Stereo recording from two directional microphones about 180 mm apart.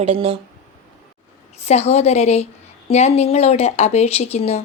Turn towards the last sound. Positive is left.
turn(degrees=35)  # may be behind; listen again after turning